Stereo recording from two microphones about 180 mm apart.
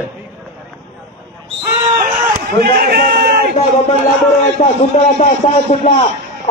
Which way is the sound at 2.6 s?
60° right (ahead or behind).